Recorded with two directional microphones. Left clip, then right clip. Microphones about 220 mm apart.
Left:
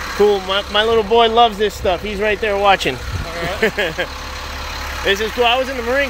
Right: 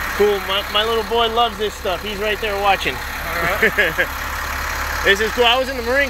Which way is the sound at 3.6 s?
10° left (ahead or behind).